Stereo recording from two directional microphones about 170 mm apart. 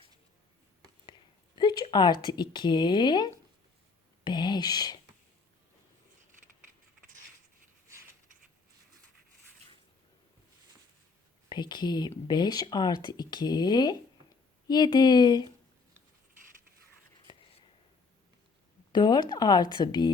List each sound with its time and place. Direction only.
1.5 s speech: 25° left (ahead or behind)
11.4 s speech: 25° left (ahead or behind)
17.3 s whispering: 25° left (ahead or behind)
18.9 s speech: 25° left (ahead or behind)